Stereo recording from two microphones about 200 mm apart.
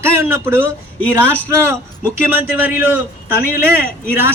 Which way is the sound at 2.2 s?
10° right (ahead or behind).